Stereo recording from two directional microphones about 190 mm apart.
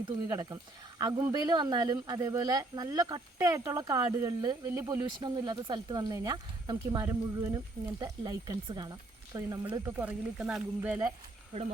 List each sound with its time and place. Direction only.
0.0 s speech: 25° right (ahead or behind); by 11.0 s 5° right (ahead or behind)